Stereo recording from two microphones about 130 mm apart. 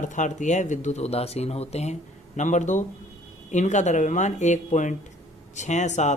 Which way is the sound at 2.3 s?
70° left (ahead or behind).